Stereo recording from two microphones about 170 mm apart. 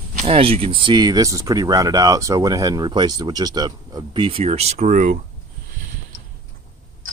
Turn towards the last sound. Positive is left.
turn(degrees=-50)  # may be behind; listen again after turning